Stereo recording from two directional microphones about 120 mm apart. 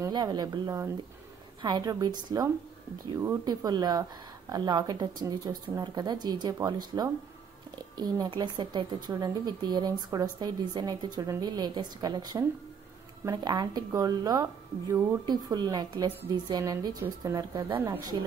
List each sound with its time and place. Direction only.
0.1 s a woman's voice: 35° right (ahead or behind)
1.6 s a woman's voice: 35° right (ahead or behind); by 18.0 s 20° right (ahead or behind)